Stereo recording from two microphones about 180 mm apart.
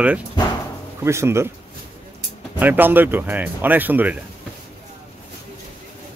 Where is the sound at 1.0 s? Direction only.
15° right (ahead or behind).